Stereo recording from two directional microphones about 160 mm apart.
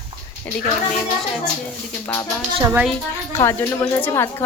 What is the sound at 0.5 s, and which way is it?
Speech, 10° left (ahead or behind).